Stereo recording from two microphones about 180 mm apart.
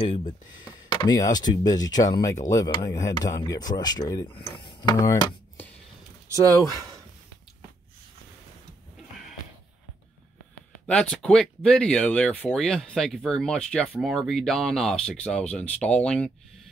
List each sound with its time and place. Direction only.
0.9 s speech: 20° left (ahead or behind)
6.3 s speech: 20° right (ahead or behind)
10.9 s speech: 5° left (ahead or behind)